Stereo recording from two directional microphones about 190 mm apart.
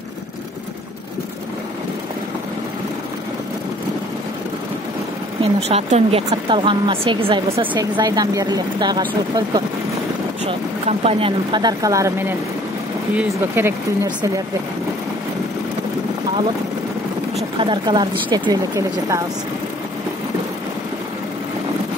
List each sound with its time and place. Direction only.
5.4 s speech: 30° right (ahead or behind)
10.9 s speech: 30° right (ahead or behind)
17.6 s speech: 25° right (ahead or behind)